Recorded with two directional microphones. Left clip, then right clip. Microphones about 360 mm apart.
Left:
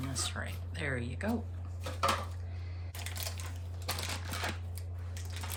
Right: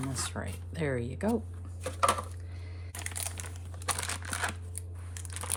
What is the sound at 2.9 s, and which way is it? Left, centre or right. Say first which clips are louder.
Crushing: right 3 dB; right.